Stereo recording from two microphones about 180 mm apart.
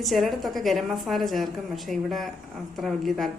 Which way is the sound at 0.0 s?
Centre (ahead or behind).